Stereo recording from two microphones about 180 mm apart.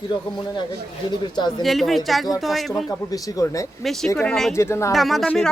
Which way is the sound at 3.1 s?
20° left (ahead or behind).